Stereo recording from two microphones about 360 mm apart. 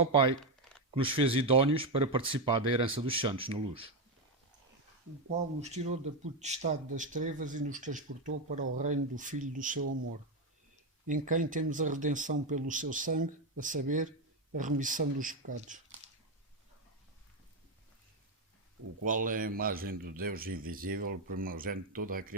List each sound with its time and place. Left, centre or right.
0.0 s speech: centre
0.3 s a sound: centre
0.9 s speech: centre
5.3 s speech: centre
11.0 s speech: right
19.0 s speech: right